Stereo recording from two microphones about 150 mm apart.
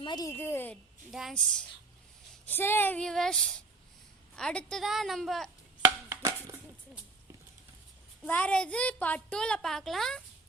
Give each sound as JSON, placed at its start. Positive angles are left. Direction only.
{"t": 0.0, "sound": "a woman's voice", "side_deg": 30}
{"t": 0.3, "sound": "speech", "side_deg": 15}
{"t": 1.1, "sound": "a woman's voice", "side_deg": 0}
{"t": 5.8, "sound": "chopping", "side_deg": -20}
{"t": 8.3, "sound": "speech", "side_deg": 10}